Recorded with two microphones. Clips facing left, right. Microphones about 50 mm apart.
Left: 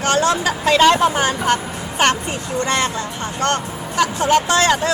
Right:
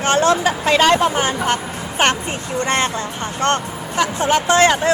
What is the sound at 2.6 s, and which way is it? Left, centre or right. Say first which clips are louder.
Speech: right 1 dB; right.